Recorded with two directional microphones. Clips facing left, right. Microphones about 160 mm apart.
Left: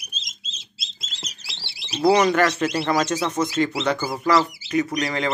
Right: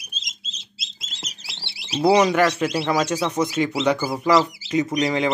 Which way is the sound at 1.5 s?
25° right (ahead or behind).